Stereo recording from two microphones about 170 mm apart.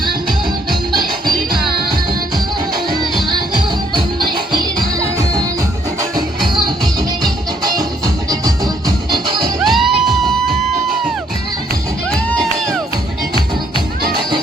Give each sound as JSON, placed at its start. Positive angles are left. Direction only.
{"t": 3.2, "sound": "music", "side_deg": -25}
{"t": 9.6, "sound": "music", "side_deg": 0}